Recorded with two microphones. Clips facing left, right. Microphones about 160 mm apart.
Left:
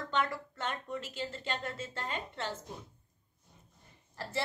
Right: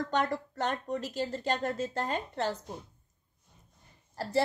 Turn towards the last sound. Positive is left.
turn(degrees=-40)  # may be behind; listen again after turning